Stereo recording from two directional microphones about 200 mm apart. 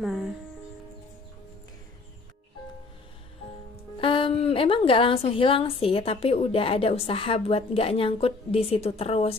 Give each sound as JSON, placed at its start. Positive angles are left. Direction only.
{"t": 0.0, "sound": "speech", "side_deg": 0}
{"t": 4.0, "sound": "a woman's voice", "side_deg": 25}